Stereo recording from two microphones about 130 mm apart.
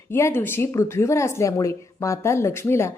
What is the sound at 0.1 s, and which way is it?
Speech, 20° left (ahead or behind).